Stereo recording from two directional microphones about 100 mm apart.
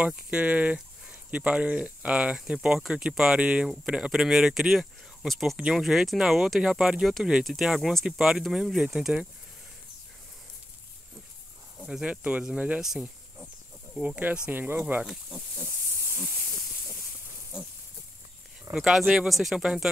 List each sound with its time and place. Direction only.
0.0 s speech: 10° right (ahead or behind)
11.8 s speech: 5° right (ahead or behind)
15.0 s speech: 5° right (ahead or behind)
18.8 s speech: centre (ahead or behind)